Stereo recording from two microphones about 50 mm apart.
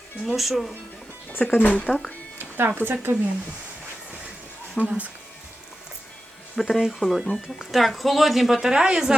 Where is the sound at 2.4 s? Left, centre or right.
Right.